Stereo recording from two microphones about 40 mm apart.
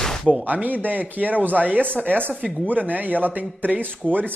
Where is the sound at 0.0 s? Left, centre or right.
Centre.